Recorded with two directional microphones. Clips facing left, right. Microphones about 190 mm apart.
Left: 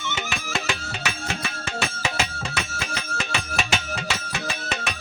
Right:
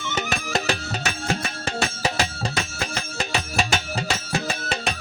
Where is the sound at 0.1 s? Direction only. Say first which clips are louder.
Right 5 dB; 40° right (ahead or behind).